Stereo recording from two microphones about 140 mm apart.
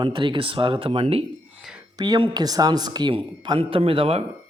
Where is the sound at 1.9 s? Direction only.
30° right (ahead or behind).